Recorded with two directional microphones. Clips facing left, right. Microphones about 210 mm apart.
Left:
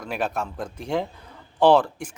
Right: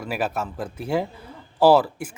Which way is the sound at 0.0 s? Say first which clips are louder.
Right 1 dB; 5° right (ahead or behind).